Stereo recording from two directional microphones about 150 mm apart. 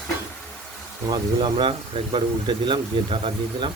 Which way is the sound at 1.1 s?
35° right (ahead or behind).